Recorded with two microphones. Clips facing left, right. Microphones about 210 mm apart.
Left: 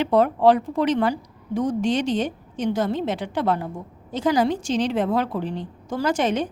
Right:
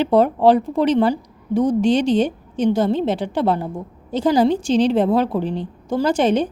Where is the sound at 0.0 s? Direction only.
30° right (ahead or behind).